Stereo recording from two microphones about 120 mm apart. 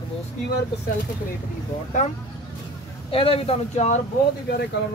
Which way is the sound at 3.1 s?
50° left (ahead or behind).